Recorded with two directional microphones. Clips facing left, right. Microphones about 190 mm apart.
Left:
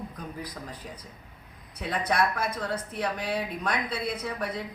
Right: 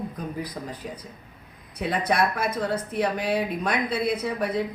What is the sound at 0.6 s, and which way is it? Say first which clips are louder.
Speech: right 6 dB; 20° right (ahead or behind).